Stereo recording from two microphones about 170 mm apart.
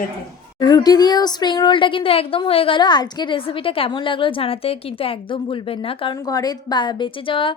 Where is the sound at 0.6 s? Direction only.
25° left (ahead or behind).